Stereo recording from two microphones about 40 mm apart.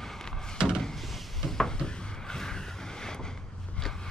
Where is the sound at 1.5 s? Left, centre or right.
Centre.